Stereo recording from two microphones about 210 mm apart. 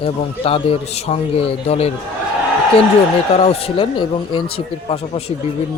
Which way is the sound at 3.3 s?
30° left (ahead or behind).